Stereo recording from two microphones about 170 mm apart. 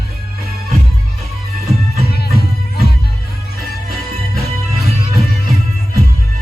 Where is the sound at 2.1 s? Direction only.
70° left (ahead or behind).